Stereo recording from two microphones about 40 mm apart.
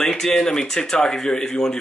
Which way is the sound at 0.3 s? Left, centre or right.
Left.